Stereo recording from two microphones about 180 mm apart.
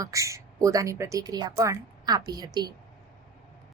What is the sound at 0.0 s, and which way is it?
A woman's voice, 15° right (ahead or behind).